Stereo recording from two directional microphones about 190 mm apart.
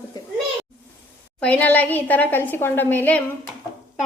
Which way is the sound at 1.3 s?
10° left (ahead or behind).